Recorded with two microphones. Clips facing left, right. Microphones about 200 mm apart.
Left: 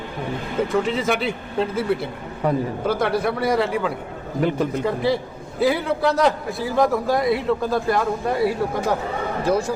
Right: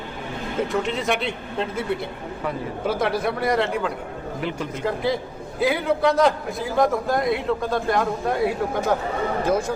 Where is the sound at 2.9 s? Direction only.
Centre (ahead or behind).